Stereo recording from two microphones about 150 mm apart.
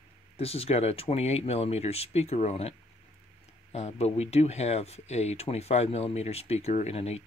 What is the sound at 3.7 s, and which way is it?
Speech, 45° left (ahead or behind).